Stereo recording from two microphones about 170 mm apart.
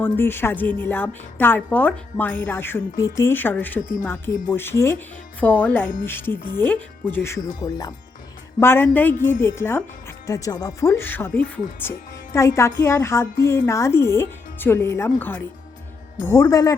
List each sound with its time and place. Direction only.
0.0 s a woman's voice: 10° left (ahead or behind)
8.6 s a woman's voice: 10° left (ahead or behind)